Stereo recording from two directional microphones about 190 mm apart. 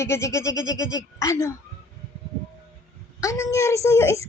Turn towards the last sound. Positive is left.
turn(degrees=15)  # may be behind; listen again after turning